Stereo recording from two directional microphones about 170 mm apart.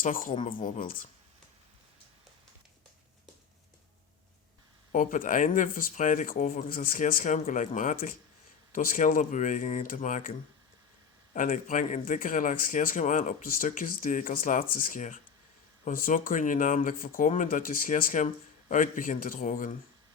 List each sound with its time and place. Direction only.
0.0 s speech: 50° left (ahead or behind)
4.9 s speech: 50° left (ahead or behind)
11.3 s speech: 50° left (ahead or behind)